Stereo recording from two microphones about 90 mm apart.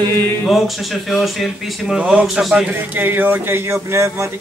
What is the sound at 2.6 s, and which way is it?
Speech, 20° right (ahead or behind).